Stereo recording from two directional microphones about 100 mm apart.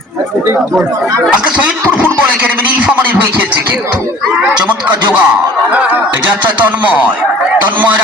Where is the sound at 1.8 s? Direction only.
25° right (ahead or behind).